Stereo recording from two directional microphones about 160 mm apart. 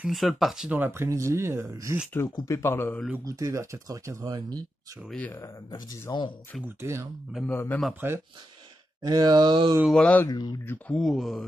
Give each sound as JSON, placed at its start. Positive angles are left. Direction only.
{"t": 0.0, "sound": "speech", "side_deg": 0}
{"t": 0.7, "sound": "speech", "side_deg": -15}
{"t": 2.1, "sound": "speech", "side_deg": 20}
{"t": 3.3, "sound": "speech", "side_deg": -20}
{"t": 5.1, "sound": "speech", "side_deg": 10}
{"t": 6.6, "sound": "speech", "side_deg": -15}
{"t": 7.5, "sound": "speech", "side_deg": 15}
{"t": 8.0, "sound": "speech", "side_deg": -15}
{"t": 9.0, "sound": "speech", "side_deg": -25}
{"t": 9.8, "sound": "speech", "side_deg": 5}
{"t": 10.2, "sound": "speech", "side_deg": 25}
{"t": 10.6, "sound": "speech", "side_deg": 10}